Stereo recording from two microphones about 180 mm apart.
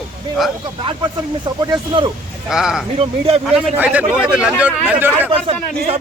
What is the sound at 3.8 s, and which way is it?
A man's voice, 10° right (ahead or behind).